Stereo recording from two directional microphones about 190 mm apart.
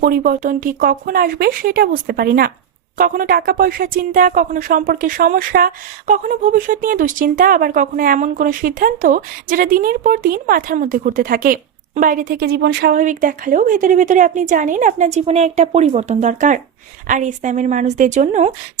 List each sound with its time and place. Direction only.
0.0 s a woman's voice: 45° right (ahead or behind)